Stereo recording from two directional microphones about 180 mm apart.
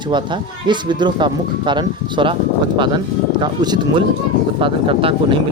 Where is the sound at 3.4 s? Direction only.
25° right (ahead or behind).